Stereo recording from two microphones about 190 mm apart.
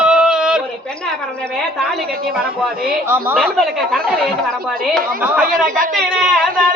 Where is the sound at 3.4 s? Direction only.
5° left (ahead or behind).